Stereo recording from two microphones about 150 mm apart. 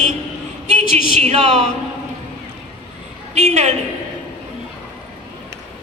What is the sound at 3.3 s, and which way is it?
Speech, 50° right (ahead or behind).